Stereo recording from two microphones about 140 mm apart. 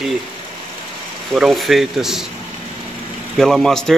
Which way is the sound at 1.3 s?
Centre (ahead or behind).